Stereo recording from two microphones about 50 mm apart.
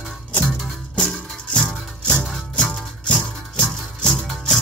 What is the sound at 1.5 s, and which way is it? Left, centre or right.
Music, centre.